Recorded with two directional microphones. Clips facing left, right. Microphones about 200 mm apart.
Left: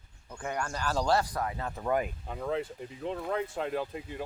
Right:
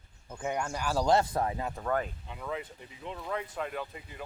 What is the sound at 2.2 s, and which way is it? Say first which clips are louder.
Speech: left 5 dB; 45° left (ahead or behind).